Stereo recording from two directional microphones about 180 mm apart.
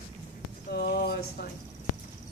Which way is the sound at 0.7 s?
60° left (ahead or behind).